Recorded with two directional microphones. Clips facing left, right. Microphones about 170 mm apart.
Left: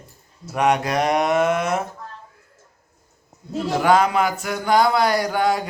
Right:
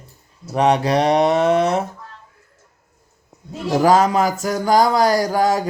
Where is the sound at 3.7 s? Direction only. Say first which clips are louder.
Right 3 dB; 40° right (ahead or behind).